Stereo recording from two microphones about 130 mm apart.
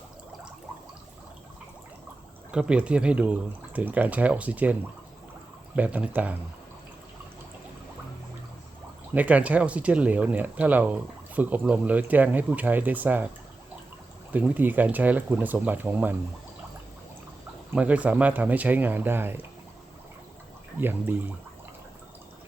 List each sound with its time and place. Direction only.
2.5 s speech: 10° right (ahead or behind)
9.1 s speech: 10° right (ahead or behind)
14.3 s speech: 15° right (ahead or behind)
17.7 s speech: 10° right (ahead or behind)
20.7 s speech: 15° right (ahead or behind)